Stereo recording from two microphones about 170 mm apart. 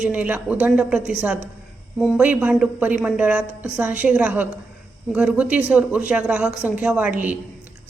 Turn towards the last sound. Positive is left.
turn(degrees=-10)  # may be behind; listen again after turning